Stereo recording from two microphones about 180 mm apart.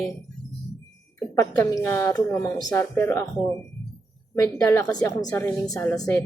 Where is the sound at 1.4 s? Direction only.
15° left (ahead or behind).